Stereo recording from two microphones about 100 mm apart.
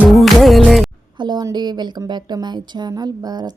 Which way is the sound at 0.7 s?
Centre (ahead or behind).